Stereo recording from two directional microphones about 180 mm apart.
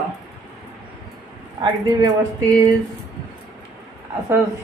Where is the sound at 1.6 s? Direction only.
20° right (ahead or behind).